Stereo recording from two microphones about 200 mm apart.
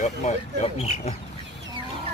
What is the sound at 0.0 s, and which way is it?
Speech, 35° left (ahead or behind).